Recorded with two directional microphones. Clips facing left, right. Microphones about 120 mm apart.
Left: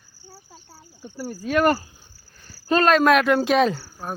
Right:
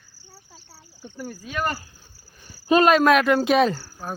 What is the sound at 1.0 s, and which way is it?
Speech, 5° left (ahead or behind).